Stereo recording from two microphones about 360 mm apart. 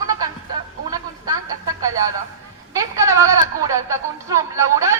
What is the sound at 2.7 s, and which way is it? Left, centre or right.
Speech, centre.